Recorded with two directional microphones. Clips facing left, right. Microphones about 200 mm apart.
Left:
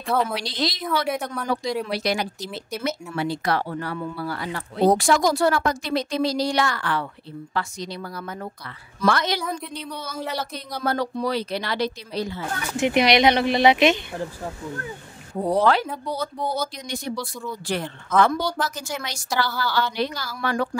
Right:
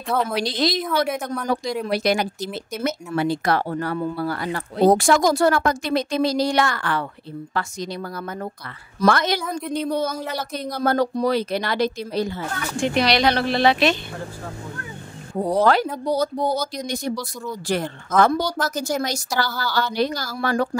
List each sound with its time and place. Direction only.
0.0 s a woman's voice: centre (ahead or behind)
0.4 s speech: 50° right (ahead or behind)
1.0 s a woman's voice: centre (ahead or behind)
1.9 s speech: 50° right (ahead or behind)
9.4 s a woman's voice: centre (ahead or behind)
9.7 s speech: 45° right (ahead or behind)
12.7 s speech: 20° left (ahead or behind)
15.5 s a woman's voice: 45° right (ahead or behind)